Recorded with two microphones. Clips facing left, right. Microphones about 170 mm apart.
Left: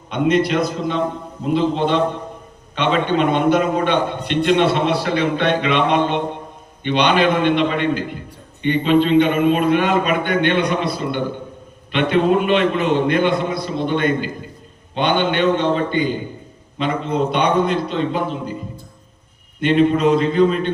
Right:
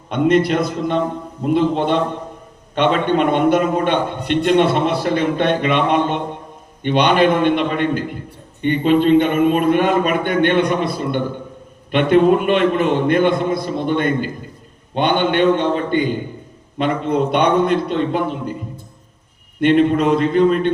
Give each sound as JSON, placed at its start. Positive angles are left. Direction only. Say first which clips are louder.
{"t": 0.1, "sound": "a man's voice", "louder": "right 2 dB", "side_deg": -50}
{"t": 19.5, "sound": "a man's voice", "louder": "right 2 dB", "side_deg": -55}